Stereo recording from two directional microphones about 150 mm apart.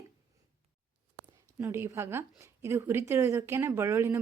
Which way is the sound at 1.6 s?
15° right (ahead or behind).